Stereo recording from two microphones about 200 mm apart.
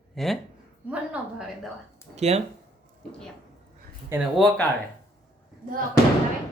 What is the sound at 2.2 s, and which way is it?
Speech, 30° right (ahead or behind).